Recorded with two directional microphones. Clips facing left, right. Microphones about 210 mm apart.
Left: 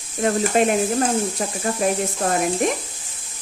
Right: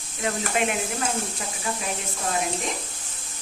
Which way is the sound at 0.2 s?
40° left (ahead or behind).